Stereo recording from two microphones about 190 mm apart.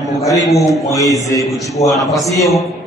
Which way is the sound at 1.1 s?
15° left (ahead or behind).